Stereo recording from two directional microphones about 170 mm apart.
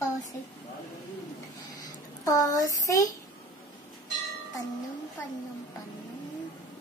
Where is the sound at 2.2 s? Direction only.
20° left (ahead or behind).